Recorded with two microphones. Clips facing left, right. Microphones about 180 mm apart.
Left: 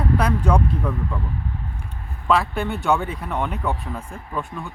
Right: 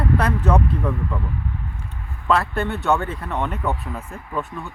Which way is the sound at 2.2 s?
Centre (ahead or behind).